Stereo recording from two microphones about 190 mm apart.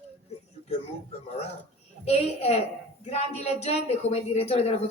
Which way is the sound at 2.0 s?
35° left (ahead or behind).